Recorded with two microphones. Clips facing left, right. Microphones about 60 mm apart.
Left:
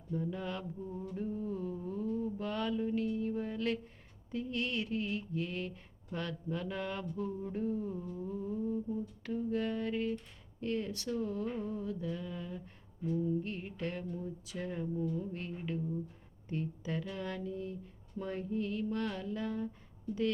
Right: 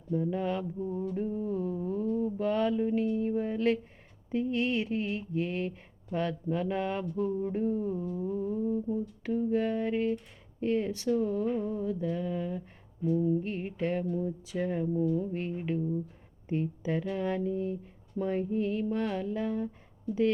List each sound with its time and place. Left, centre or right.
0.1 s speech: right
1.1 s mantra: right
2.1 s speech: right
11.4 s a sound: centre
11.7 s speech: right